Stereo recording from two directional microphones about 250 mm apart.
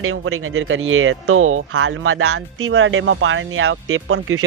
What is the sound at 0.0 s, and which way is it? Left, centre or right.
Speech, right.